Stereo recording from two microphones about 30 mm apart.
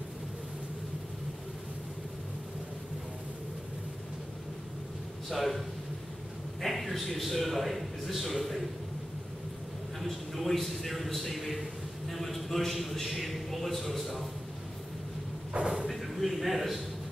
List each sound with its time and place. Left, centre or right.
5.3 s a man's voice: centre
6.6 s a man's voice: centre
9.9 s a man's voice: centre
15.6 s sliding door: right
15.9 s a sound: centre